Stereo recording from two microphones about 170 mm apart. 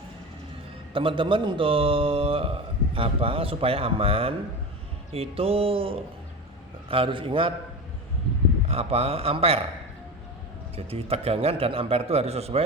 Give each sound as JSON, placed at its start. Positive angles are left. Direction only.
{"t": 0.9, "sound": "a man's voice", "side_deg": -30}
{"t": 8.6, "sound": "a man's voice", "side_deg": -35}
{"t": 10.8, "sound": "a man's voice", "side_deg": -35}